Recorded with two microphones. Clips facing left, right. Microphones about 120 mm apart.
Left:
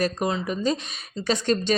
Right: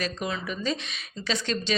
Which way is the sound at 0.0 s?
40° left (ahead or behind).